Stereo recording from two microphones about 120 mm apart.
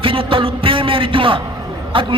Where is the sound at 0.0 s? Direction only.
45° right (ahead or behind).